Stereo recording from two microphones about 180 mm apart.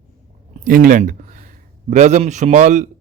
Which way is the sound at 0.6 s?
50° right (ahead or behind).